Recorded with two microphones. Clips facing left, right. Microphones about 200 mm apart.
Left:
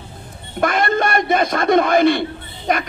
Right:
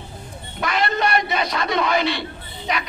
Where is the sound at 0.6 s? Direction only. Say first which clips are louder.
Left 5 dB; 50° left (ahead or behind).